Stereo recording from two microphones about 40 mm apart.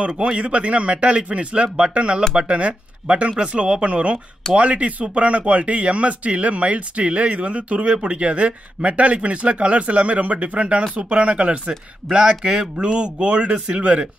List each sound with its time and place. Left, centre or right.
0.0 s speech: right